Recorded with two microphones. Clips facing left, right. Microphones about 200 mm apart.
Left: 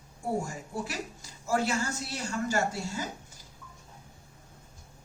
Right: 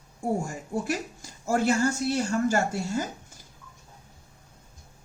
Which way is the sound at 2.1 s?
50° right (ahead or behind).